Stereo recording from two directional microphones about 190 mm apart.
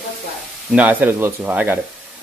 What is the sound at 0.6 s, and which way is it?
Speech, 5° right (ahead or behind).